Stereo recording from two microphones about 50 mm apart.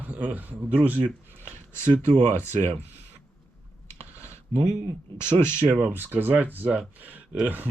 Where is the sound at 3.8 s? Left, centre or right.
Left.